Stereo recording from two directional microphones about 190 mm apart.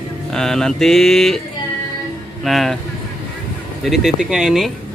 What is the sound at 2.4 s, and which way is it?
Speech, centre (ahead or behind).